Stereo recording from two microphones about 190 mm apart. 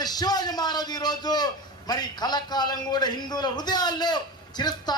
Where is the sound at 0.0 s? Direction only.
20° left (ahead or behind).